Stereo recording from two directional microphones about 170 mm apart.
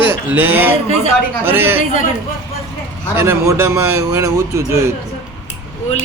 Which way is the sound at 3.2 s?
15° right (ahead or behind).